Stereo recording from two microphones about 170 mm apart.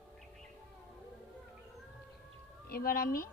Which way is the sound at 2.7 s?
60° left (ahead or behind).